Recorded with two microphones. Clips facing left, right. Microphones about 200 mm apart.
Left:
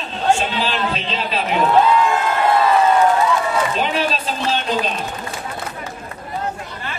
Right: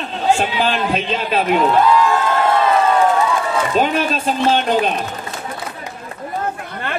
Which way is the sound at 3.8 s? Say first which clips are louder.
Right 3 dB; 50° right (ahead or behind).